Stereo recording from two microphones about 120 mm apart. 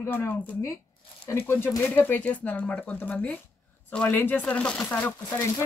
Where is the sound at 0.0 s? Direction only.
20° left (ahead or behind).